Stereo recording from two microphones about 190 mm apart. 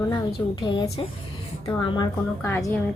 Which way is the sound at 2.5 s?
10° left (ahead or behind).